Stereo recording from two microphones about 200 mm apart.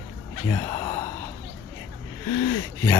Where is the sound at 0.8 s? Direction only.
25° left (ahead or behind).